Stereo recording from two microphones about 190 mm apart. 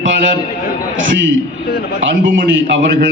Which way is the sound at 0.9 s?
85° right.